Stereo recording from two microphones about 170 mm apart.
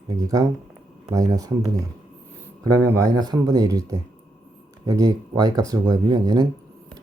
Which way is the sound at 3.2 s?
25° right (ahead or behind).